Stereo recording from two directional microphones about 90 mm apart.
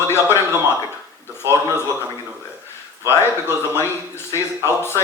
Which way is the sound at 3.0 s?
30° left (ahead or behind).